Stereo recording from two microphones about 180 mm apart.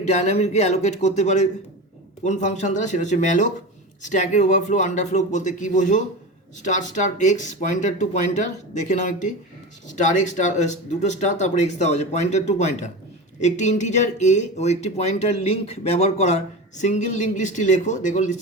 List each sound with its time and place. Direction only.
0.1 s speech: 40° left (ahead or behind)